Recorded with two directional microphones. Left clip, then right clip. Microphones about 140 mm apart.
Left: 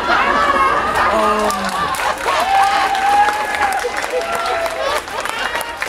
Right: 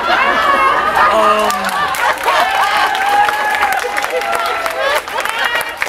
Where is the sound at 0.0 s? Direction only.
15° right (ahead or behind).